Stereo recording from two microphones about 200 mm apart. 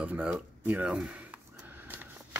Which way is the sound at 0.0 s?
5° right (ahead or behind).